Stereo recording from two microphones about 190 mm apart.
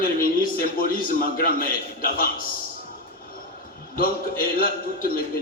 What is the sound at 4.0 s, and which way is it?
A man's voice, 50° left (ahead or behind).